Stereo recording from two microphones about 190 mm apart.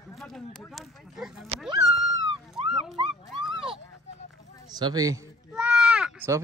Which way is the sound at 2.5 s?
Centre (ahead or behind).